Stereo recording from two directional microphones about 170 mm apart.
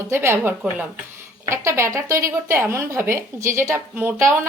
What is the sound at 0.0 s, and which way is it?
Speech, 15° right (ahead or behind).